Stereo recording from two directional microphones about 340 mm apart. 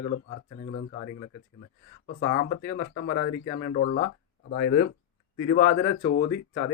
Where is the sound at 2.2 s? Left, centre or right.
Left.